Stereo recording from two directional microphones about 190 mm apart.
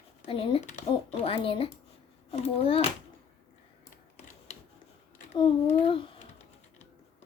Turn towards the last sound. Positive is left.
turn(degrees=30)  # may be behind; listen again after turning